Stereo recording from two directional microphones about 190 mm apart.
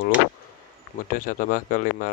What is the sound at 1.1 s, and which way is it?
Speech, 45° left (ahead or behind).